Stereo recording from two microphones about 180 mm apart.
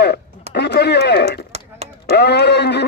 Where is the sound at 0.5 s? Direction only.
65° left (ahead or behind).